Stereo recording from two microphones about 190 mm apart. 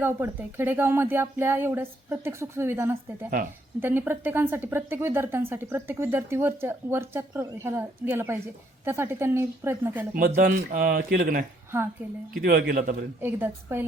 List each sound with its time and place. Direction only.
0.0 s speech: 10° right (ahead or behind)
10.2 s speech: 45° right (ahead or behind)
13.2 s speech: 10° right (ahead or behind)